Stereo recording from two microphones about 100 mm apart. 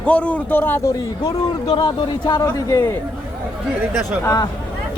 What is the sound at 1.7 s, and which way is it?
Speech, 50° left (ahead or behind).